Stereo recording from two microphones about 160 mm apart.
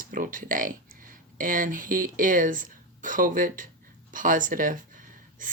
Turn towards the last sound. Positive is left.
turn(degrees=-55)  # may be behind; listen again after turning